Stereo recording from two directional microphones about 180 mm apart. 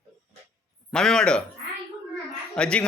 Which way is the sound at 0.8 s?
5° left (ahead or behind).